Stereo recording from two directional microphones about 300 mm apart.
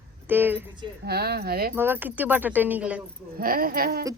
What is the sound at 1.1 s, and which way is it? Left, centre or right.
Speech, right.